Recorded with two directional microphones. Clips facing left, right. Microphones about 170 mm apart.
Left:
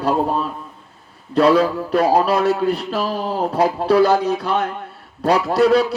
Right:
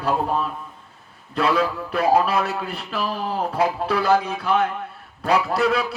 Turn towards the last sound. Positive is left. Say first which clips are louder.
# left 5 dB
turn(degrees=40)  # may be behind; listen again after turning